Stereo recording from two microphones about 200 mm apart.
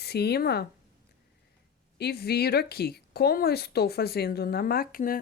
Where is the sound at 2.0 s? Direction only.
55° left (ahead or behind).